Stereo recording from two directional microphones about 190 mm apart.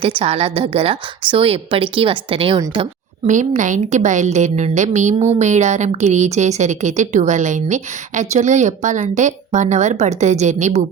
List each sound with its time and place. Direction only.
0.0 s a woman's voice: 30° right (ahead or behind)
3.2 s a woman's voice: 40° right (ahead or behind)